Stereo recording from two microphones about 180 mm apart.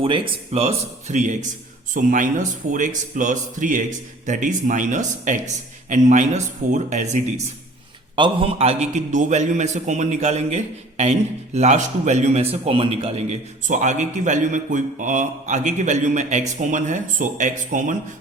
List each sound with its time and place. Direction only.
0.0 s a man's voice: 30° right (ahead or behind)
8.1 s a man's voice: 30° right (ahead or behind); by 17.9 s 45° right (ahead or behind)